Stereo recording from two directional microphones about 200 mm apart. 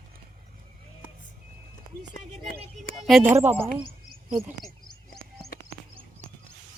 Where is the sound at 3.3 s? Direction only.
10° right (ahead or behind).